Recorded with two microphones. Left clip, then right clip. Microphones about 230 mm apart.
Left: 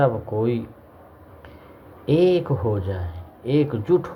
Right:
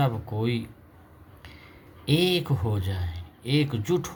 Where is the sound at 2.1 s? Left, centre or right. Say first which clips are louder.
Left 6 dB; right.